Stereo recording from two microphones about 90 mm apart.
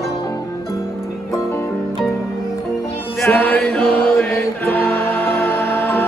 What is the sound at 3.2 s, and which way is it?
Music, 20° left (ahead or behind).